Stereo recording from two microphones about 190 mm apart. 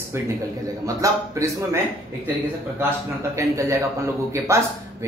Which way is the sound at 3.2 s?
15° right (ahead or behind).